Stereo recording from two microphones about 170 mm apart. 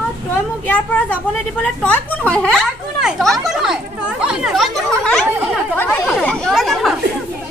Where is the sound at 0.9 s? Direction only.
10° left (ahead or behind).